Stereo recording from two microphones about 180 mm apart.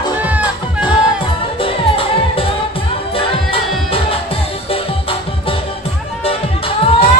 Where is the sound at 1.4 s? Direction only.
30° left (ahead or behind).